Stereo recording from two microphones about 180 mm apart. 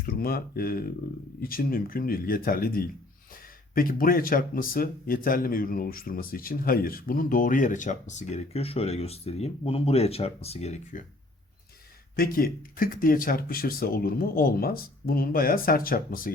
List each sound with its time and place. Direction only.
0.0 s speech: 55° left (ahead or behind); by 11.0 s 40° left (ahead or behind)
12.1 s speech: 55° left (ahead or behind)